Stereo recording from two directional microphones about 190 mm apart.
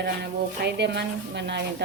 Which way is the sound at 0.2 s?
60° right (ahead or behind).